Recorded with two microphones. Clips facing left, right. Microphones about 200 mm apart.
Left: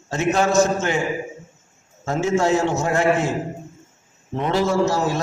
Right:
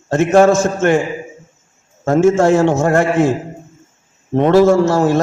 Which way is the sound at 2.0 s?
55° right (ahead or behind).